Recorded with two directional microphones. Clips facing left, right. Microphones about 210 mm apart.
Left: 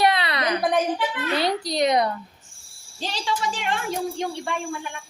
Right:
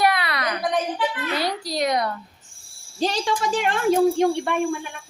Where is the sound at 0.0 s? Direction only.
25° left (ahead or behind).